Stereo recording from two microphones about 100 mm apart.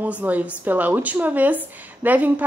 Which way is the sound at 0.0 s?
15° right (ahead or behind).